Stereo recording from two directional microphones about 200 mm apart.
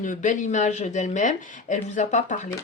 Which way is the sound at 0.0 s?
40° left (ahead or behind).